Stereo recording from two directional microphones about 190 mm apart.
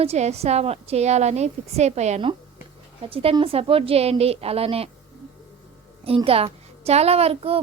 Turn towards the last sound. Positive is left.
turn(degrees=-30)  # may be behind; listen again after turning